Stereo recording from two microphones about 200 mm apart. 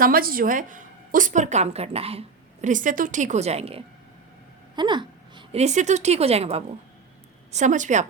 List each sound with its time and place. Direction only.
0.0 s a woman's voice: 45° right (ahead or behind)